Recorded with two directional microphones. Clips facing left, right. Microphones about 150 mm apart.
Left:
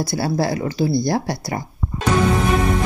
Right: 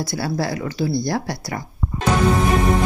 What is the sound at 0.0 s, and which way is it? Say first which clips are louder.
Speech: left 3 dB; 30° left (ahead or behind).